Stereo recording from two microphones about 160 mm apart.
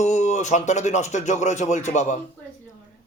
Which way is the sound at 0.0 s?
45° left (ahead or behind).